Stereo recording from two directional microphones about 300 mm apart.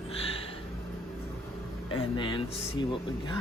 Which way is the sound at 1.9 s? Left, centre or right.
Centre.